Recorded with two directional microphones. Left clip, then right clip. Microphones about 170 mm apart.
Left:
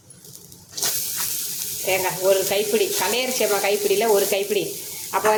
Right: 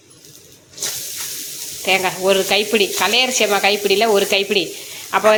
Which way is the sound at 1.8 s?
20° right (ahead or behind).